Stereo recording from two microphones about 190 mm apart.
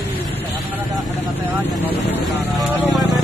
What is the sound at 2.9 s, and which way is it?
Music, centre (ahead or behind).